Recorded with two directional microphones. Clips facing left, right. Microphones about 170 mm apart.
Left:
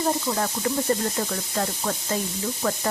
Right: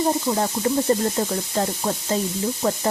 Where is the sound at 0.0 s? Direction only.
20° right (ahead or behind).